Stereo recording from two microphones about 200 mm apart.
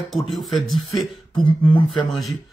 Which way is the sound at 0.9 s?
20° left (ahead or behind).